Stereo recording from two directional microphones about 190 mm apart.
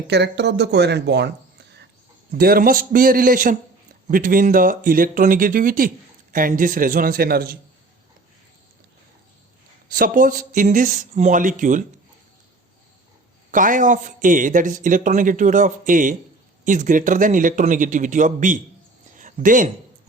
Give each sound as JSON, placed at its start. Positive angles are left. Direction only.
{"t": 0.1, "sound": "speech", "side_deg": -65}
{"t": 2.4, "sound": "a man's voice", "side_deg": -50}
{"t": 9.9, "sound": "a man's voice", "side_deg": -45}
{"t": 13.5, "sound": "a man's voice", "side_deg": -45}
{"t": 19.1, "sound": "a sound", "side_deg": -45}